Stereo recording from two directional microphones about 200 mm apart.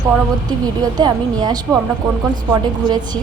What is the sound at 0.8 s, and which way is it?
A woman's voice, 20° right (ahead or behind).